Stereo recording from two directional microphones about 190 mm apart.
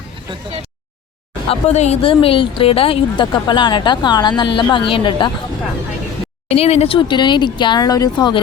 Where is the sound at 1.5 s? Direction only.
35° left (ahead or behind).